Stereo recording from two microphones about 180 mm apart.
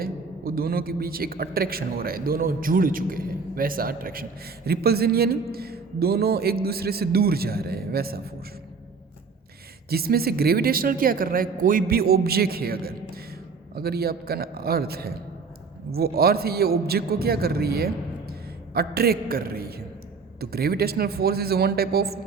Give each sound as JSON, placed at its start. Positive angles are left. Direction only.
{"t": 0.0, "sound": "a man's voice", "side_deg": -55}
{"t": 9.9, "sound": "a man's voice", "side_deg": -60}